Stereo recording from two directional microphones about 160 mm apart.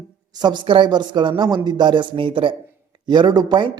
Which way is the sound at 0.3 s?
30° right (ahead or behind).